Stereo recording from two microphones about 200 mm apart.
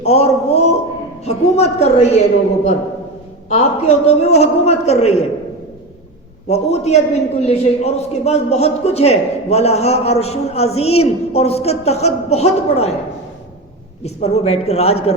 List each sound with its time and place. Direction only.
0.0 s a man's voice: 30° left (ahead or behind)
3.5 s a man's voice: 30° left (ahead or behind)
6.5 s a man's voice: 30° left (ahead or behind)
14.0 s a man's voice: 30° left (ahead or behind)